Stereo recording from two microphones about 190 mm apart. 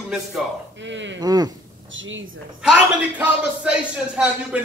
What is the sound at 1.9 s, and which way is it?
Speech, 90° right.